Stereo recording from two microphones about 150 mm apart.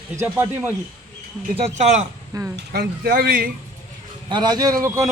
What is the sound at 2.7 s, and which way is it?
Speech, 90° right.